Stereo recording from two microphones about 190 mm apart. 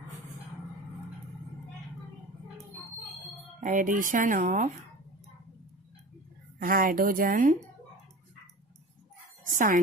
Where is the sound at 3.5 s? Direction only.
45° right (ahead or behind).